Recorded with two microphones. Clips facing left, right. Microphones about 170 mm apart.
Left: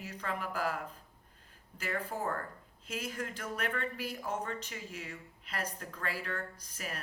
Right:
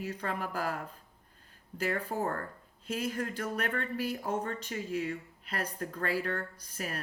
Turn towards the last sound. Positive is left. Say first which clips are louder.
# right 4 dB
turn(degrees=-45)  # may be behind; listen again after turning